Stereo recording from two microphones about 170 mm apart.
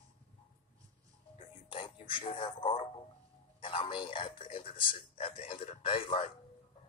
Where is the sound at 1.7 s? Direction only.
30° left (ahead or behind).